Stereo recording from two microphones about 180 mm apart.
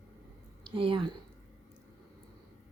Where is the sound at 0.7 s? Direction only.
30° right (ahead or behind).